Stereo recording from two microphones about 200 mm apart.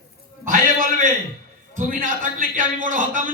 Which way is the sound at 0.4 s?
40° right (ahead or behind).